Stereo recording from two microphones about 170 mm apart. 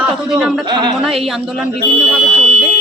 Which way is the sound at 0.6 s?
25° right (ahead or behind).